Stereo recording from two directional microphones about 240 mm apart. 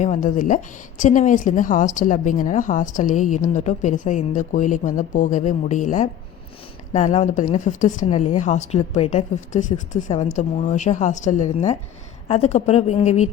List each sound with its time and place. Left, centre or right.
0.0 s a woman's voice: left